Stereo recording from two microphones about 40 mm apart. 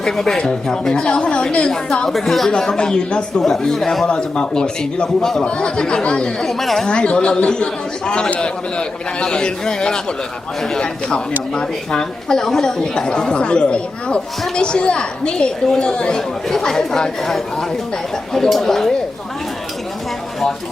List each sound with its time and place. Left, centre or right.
0.0 s a woman's voice: centre
2.0 s speech: centre
2.5 s a woman's voice: left
3.4 s speech: centre
4.1 s a woman's voice: left
6.4 s speech: centre
6.8 s a woman's voice: left
11.5 s a woman's voice: centre
16.5 s speech: centre
18.3 s speech: centre